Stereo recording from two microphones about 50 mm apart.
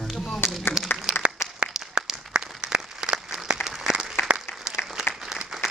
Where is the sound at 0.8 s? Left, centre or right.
Centre.